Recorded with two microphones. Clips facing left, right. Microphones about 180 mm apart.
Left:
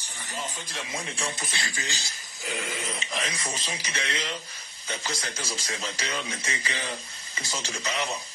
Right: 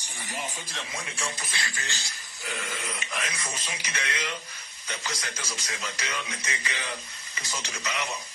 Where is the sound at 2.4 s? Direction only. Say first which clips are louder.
Left 3 dB; 45° left (ahead or behind).